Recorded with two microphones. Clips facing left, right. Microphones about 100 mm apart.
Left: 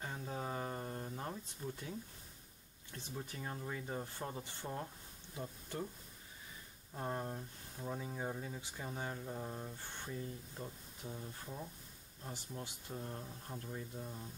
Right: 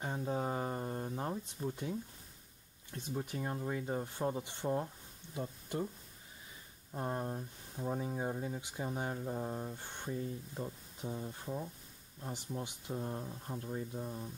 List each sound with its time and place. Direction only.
0.0 s a sound: 20° right (ahead or behind)
2.9 s speech: 20° right (ahead or behind)
6.9 s speech: 15° right (ahead or behind)